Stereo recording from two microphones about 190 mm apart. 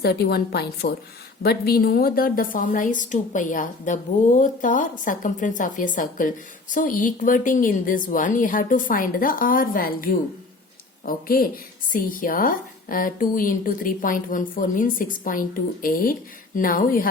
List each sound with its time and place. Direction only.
0.0 s a woman's voice: 55° left (ahead or behind)